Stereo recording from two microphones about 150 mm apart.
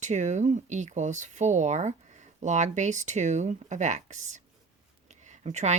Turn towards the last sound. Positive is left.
turn(degrees=-50)  # may be behind; listen again after turning